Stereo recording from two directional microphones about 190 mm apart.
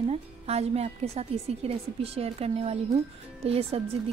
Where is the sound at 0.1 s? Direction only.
35° right (ahead or behind).